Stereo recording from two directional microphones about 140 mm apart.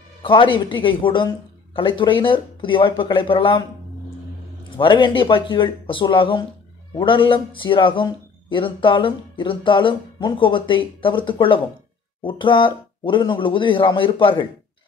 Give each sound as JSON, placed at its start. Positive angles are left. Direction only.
{"t": 0.2, "sound": "a man's voice", "side_deg": 35}
{"t": 4.6, "sound": "a man's voice", "side_deg": 35}